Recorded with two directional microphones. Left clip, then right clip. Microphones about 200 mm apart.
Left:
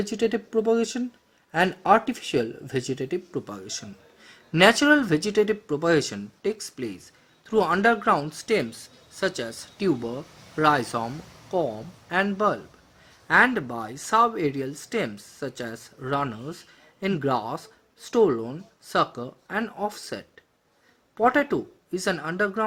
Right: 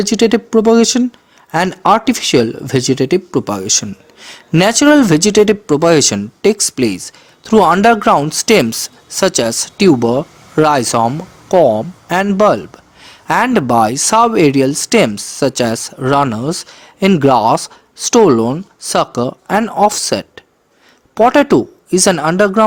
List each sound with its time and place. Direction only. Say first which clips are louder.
0.0 s speech: right 13 dB; 35° right (ahead or behind)